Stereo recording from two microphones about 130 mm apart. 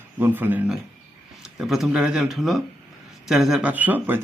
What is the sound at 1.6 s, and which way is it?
A man's voice, 5° right (ahead or behind).